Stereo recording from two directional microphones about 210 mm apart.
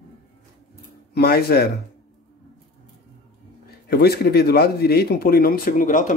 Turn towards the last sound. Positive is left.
turn(degrees=40)  # may be behind; listen again after turning